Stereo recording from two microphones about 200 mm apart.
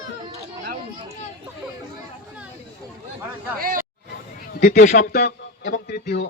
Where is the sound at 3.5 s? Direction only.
45° right (ahead or behind).